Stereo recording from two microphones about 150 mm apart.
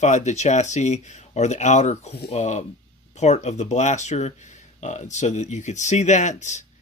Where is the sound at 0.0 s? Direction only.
50° left (ahead or behind).